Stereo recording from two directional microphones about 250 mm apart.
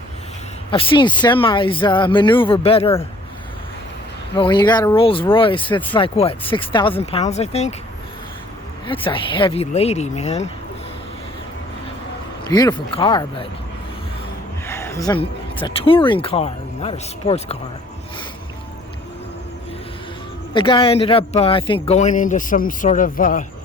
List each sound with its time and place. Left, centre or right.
0.7 s speech: centre
4.4 s speech: centre
8.9 s speech: left
12.5 s speech: centre
14.7 s a sound: centre
15.6 s speech: left
20.5 s speech: centre